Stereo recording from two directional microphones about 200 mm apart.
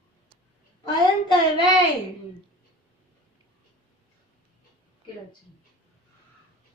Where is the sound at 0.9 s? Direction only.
20° left (ahead or behind).